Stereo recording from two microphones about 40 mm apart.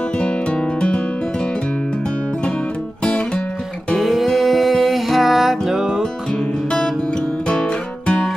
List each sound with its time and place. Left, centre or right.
0.2 s music: left
4.0 s music: centre